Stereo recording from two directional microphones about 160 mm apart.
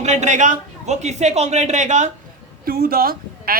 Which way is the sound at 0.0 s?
45° right (ahead or behind).